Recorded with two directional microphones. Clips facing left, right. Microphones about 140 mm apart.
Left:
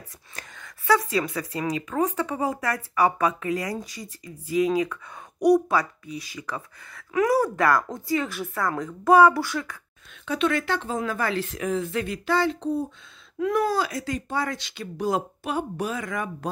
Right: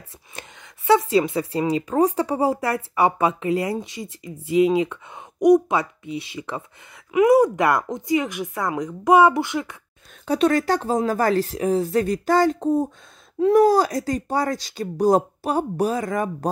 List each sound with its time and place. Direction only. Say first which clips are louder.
0.4 s a woman's voice: right 2 dB; 25° right (ahead or behind)
10.2 s speech: right 6 dB; 40° right (ahead or behind)